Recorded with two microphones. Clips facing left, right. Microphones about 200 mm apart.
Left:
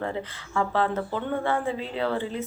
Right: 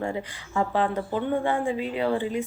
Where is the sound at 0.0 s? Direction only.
15° right (ahead or behind).